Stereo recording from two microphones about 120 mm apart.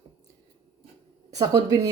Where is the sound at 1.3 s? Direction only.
30° right (ahead or behind).